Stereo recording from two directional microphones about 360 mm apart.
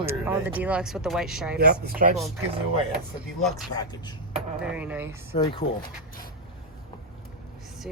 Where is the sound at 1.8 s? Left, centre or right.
Right.